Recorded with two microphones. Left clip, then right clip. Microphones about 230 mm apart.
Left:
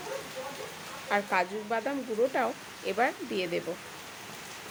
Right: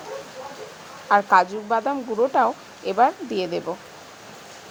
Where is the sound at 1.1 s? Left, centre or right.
Right.